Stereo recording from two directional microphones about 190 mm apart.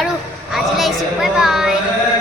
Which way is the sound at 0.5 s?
Centre (ahead or behind).